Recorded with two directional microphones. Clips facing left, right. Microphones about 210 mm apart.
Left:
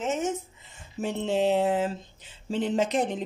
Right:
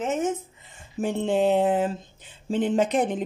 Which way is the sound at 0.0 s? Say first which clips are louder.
Right 3 dB; 50° right (ahead or behind).